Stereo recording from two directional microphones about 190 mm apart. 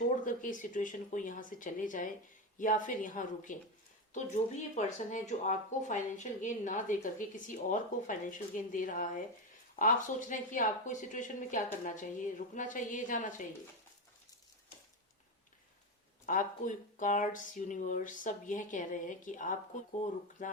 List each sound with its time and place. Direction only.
0.3 s speech: 45° left (ahead or behind)
16.2 s speech: 45° left (ahead or behind)